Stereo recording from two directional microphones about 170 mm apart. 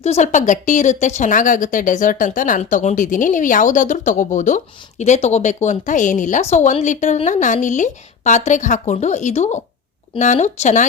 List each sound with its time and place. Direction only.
0.0 s speech: 40° left (ahead or behind)